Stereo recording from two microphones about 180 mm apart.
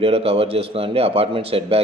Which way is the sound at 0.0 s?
30° right (ahead or behind).